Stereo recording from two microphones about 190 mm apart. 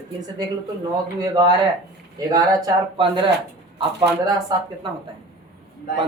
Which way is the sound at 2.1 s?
20° right (ahead or behind).